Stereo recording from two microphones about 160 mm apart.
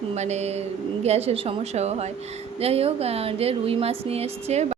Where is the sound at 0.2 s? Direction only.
45° right (ahead or behind).